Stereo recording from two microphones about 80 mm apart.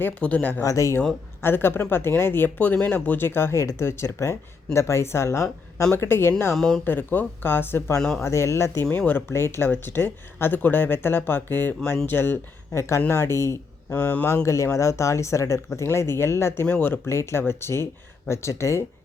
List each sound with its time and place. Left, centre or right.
0.0 s speech: centre
0.6 s speech: left
1.4 s speech: left
6.5 s speech: centre
6.8 s speech: left
7.9 s speech: centre
8.2 s speech: left
8.8 s speech: left
13.9 s speech: centre
14.4 s speech: left
16.6 s speech: left
17.1 s speech: left